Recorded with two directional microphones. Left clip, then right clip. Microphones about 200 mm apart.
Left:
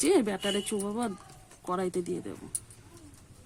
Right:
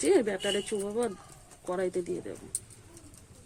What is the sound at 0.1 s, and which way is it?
Speech, 55° left (ahead or behind).